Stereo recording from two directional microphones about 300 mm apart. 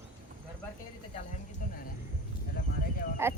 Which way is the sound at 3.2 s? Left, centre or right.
Centre.